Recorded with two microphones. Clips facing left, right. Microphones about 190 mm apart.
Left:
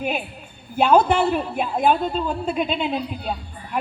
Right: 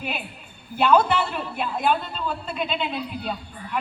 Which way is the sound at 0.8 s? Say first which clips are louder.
Left 3 dB; 50° left (ahead or behind).